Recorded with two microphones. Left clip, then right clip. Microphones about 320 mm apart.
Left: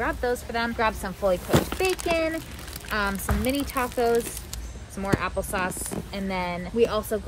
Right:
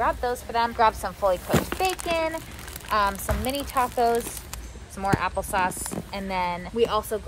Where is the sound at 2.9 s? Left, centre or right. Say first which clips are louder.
Right 4 dB; centre.